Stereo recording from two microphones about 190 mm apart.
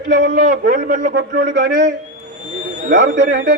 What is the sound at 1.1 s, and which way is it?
Speech, 65° right (ahead or behind).